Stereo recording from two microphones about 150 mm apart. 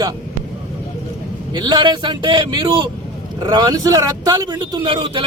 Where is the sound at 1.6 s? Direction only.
30° right (ahead or behind).